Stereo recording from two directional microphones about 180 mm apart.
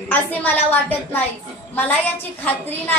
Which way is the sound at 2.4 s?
10° left (ahead or behind).